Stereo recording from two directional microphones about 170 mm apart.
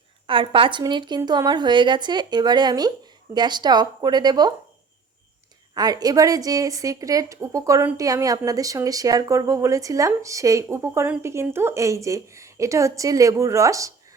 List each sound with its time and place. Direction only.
0.3 s a woman's voice: 30° right (ahead or behind)
5.7 s a woman's voice: 25° right (ahead or behind)